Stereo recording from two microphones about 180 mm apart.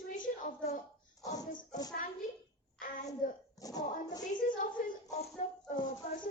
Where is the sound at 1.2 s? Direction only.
20° left (ahead or behind).